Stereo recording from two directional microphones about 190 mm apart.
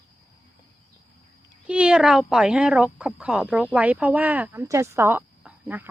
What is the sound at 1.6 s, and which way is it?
Speech, 5° right (ahead or behind).